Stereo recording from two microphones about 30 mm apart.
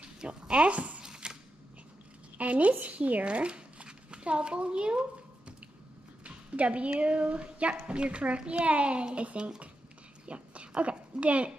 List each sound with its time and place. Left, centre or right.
0.2 s a woman's voice: right
0.7 s speech: right
1.0 s a sound: right
2.3 s a woman's voice: right
3.3 s speech: right
6.2 s speech: right
10.2 s a sound: right